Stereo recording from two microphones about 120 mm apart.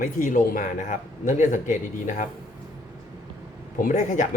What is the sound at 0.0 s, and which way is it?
Speech, 90° left.